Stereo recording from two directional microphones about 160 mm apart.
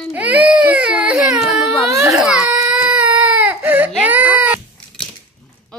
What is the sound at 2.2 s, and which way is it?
Baby cry, 5° right (ahead or behind).